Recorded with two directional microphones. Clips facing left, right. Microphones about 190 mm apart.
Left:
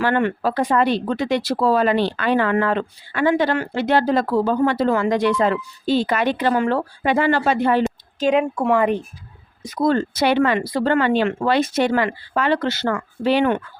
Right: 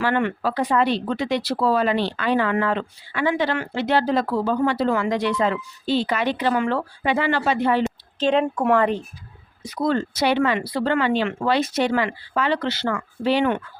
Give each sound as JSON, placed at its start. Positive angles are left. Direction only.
{"t": 0.0, "sound": "speech", "side_deg": 45}
{"t": 8.2, "sound": "speech", "side_deg": 10}
{"t": 9.6, "sound": "speech", "side_deg": 45}